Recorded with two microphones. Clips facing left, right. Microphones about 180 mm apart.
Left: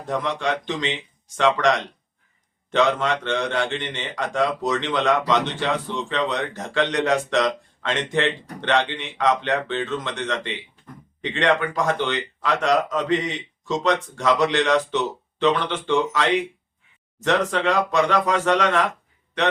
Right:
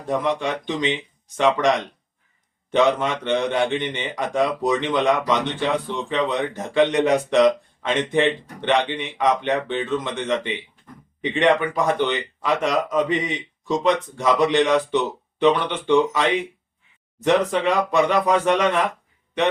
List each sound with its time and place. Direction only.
0.1 s a man's voice: 15° right (ahead or behind)
2.7 s a man's voice: 15° right (ahead or behind)